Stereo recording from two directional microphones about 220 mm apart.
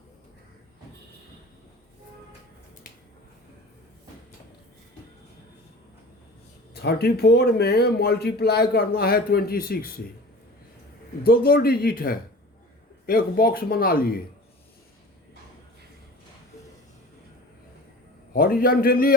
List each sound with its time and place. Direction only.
6.7 s speech: 45° left (ahead or behind)
11.3 s speech: 45° left (ahead or behind)
18.3 s speech: 40° left (ahead or behind)